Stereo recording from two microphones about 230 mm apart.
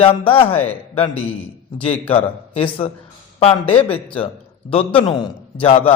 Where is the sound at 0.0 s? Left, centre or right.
Left.